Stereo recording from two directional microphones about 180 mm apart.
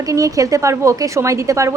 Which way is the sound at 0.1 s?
20° right (ahead or behind).